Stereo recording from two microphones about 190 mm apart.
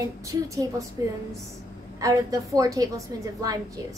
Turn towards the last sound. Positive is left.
turn(degrees=-15)  # may be behind; listen again after turning